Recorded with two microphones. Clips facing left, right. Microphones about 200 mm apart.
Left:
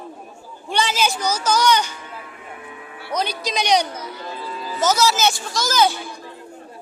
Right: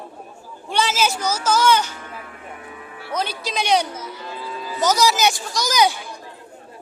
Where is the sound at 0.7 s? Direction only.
5° right (ahead or behind).